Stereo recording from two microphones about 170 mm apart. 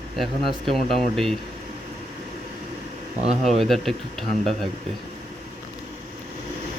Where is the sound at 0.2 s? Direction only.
Centre (ahead or behind).